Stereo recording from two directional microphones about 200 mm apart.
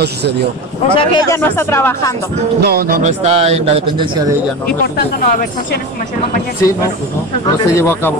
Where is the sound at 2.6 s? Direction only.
50° right (ahead or behind); by 4.3 s 20° right (ahead or behind).